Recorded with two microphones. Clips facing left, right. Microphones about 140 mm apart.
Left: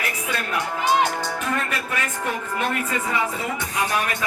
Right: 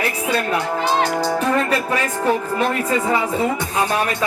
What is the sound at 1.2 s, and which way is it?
Speech, 35° right (ahead or behind).